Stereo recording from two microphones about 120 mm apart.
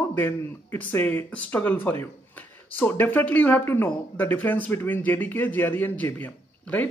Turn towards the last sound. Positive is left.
turn(degrees=15)  # may be behind; listen again after turning